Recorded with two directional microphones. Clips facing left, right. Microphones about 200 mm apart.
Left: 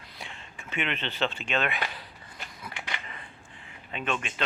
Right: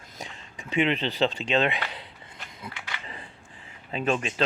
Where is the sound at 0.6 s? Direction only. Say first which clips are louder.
Right 8 dB; 35° right (ahead or behind).